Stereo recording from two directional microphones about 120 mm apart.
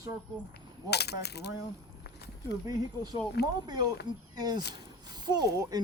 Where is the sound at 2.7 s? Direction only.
35° right (ahead or behind).